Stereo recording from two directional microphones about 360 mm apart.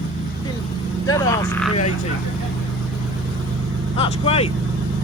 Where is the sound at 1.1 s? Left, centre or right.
Centre.